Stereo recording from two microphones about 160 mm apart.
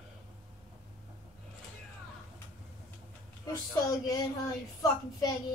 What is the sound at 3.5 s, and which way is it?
A woman's voice, 20° left (ahead or behind).